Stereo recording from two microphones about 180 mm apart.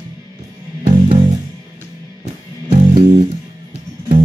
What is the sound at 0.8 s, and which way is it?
Music, 35° right (ahead or behind).